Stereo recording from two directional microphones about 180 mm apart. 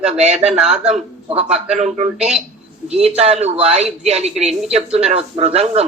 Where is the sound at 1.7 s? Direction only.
40° right (ahead or behind).